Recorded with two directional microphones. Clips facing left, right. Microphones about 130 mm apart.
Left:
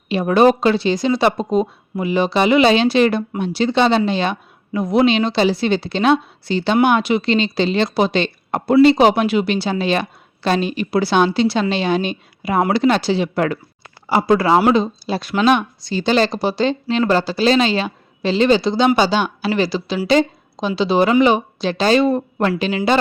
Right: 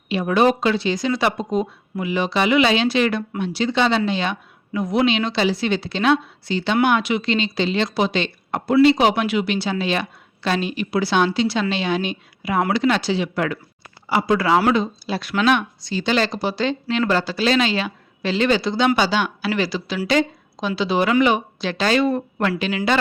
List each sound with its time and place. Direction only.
0.1 s speech: 35° left (ahead or behind)
16.8 s speech: 20° left (ahead or behind)
17.1 s speech: 35° left (ahead or behind)